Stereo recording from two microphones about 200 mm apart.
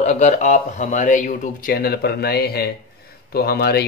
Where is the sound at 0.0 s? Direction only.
35° left (ahead or behind).